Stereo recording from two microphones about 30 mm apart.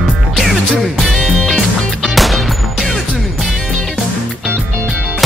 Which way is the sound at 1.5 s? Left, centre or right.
Centre.